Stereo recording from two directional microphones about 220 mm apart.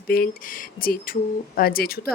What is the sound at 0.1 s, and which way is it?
A woman's voice, 40° left (ahead or behind).